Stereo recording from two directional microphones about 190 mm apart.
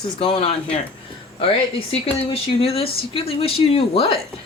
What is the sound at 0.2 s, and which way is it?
Speech, 30° left (ahead or behind).